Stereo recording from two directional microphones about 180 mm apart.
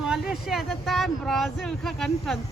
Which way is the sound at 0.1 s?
Centre (ahead or behind).